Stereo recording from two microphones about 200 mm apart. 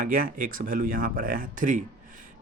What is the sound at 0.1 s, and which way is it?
Speech, 45° right (ahead or behind).